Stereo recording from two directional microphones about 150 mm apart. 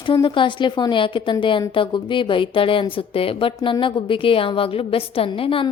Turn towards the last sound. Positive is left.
turn(degrees=35)  # may be behind; listen again after turning